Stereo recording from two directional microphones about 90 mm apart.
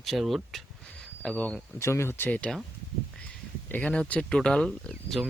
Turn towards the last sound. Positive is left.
turn(degrees=0)  # may be behind; listen again after turning